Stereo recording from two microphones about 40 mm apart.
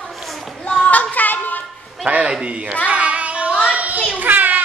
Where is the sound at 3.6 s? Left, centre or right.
Right.